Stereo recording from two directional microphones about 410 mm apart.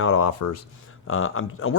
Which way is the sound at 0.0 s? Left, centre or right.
Left.